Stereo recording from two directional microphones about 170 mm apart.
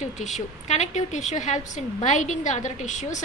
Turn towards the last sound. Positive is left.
turn(degrees=45)  # may be behind; listen again after turning